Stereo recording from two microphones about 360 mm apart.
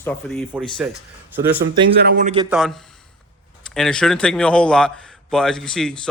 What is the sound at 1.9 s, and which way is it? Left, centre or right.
Speech, right.